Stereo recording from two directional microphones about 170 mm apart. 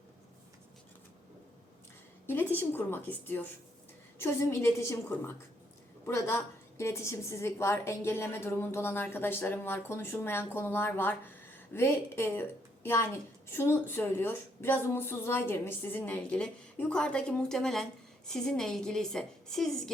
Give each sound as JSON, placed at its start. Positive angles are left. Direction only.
{"t": 2.2, "sound": "a woman's voice", "side_deg": 10}